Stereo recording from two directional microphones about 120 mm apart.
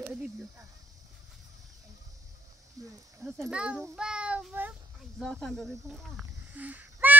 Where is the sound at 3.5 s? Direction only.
10° right (ahead or behind).